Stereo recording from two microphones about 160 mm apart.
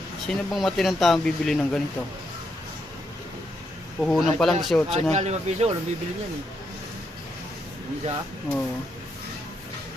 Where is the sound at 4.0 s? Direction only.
Centre (ahead or behind).